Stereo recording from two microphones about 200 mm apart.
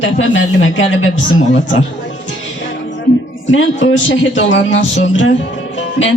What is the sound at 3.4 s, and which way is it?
A woman's voice, 70° left (ahead or behind).